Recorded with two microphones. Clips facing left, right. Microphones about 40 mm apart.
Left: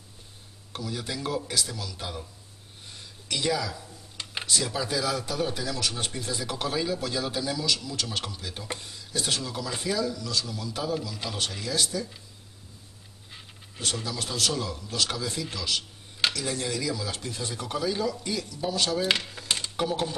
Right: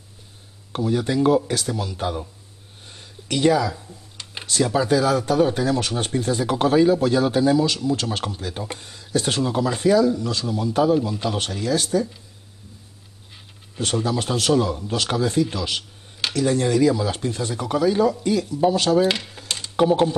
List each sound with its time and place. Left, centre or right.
0.7 s a man's voice: right
2.9 s a sound: right
4.7 s a man's voice: right
13.7 s a man's voice: right
19.4 s computer keyboard: centre
19.8 s speech: right